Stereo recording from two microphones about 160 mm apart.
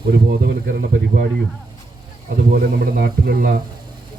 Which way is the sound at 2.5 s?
65° right (ahead or behind).